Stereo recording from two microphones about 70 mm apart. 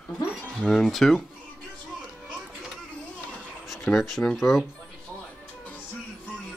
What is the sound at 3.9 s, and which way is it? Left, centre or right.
Speech, centre.